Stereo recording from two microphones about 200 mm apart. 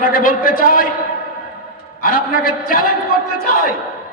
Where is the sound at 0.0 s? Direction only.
45° left (ahead or behind).